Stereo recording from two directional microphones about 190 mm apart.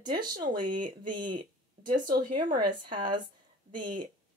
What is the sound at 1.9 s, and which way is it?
Speech, 45° right (ahead or behind).